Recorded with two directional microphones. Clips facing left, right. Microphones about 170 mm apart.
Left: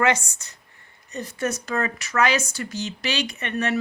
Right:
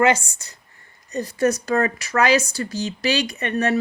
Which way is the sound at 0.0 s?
30° right (ahead or behind).